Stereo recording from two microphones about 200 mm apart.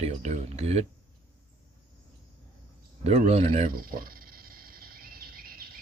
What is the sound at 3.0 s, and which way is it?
Speech, 35° right (ahead or behind).